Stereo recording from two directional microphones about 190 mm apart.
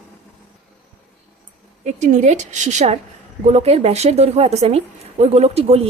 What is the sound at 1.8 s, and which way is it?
A woman's voice, 40° right (ahead or behind).